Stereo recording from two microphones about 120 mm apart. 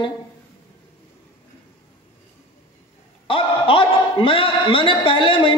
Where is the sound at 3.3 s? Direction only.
45° left (ahead or behind).